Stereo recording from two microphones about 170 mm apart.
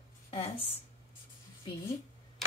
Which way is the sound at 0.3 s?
35° left (ahead or behind).